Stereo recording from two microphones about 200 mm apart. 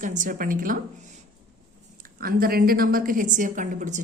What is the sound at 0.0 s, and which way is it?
Speech, 40° right (ahead or behind).